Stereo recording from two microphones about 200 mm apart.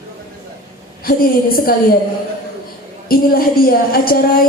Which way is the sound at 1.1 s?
50° left (ahead or behind).